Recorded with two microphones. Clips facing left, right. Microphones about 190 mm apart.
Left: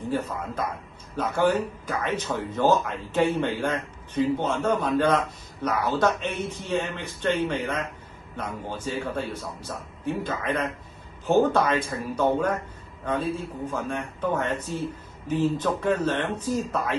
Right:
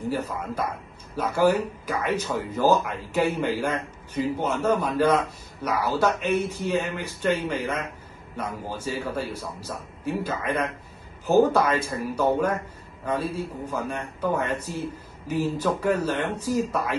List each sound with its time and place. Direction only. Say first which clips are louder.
1.1 s speech: right 2 dB; 10° right (ahead or behind)